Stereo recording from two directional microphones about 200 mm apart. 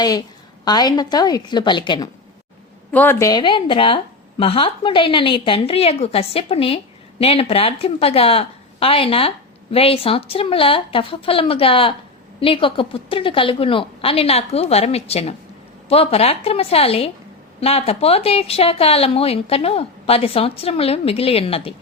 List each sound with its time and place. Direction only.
0.0 s a woman's voice: 20° left (ahead or behind)
2.9 s a woman's voice: 10° left (ahead or behind); by 21.7 s 30° left (ahead or behind)